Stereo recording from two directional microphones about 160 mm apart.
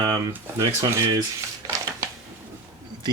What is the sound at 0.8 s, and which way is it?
Speech, 25° right (ahead or behind).